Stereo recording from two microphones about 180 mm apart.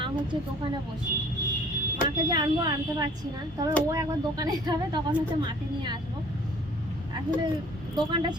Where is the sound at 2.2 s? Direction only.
25° right (ahead or behind).